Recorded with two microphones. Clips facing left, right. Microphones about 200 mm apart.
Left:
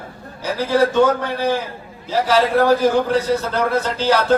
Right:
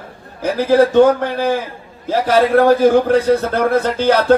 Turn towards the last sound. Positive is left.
turn(degrees=-55)  # may be behind; listen again after turning